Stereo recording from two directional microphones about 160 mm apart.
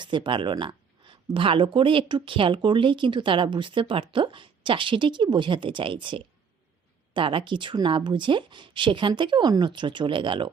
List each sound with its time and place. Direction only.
0.0 s a woman's voice: 30° right (ahead or behind)